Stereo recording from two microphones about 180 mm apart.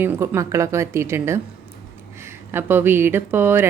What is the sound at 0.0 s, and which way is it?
A woman's voice, 15° right (ahead or behind).